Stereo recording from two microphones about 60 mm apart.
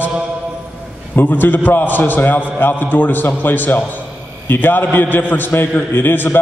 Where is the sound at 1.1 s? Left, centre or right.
Left.